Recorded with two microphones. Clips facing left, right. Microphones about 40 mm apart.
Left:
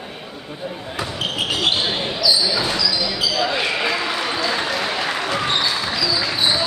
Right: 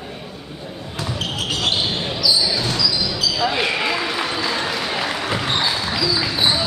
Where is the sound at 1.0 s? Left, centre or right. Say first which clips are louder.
Left 1 dB; centre.